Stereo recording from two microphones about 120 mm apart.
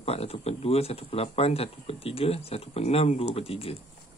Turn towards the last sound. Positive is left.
turn(degrees=55)  # may be behind; listen again after turning